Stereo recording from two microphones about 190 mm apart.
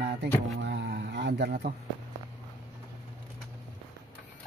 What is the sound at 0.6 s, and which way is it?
Speech, 65° right (ahead or behind).